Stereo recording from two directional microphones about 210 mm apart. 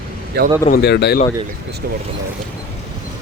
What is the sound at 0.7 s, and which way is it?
Speech, 50° left (ahead or behind).